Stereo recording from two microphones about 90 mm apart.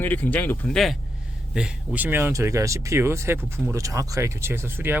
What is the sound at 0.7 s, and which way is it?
Speech, centre (ahead or behind).